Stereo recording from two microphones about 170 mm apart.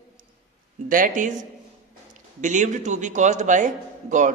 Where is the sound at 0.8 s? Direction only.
55° right (ahead or behind).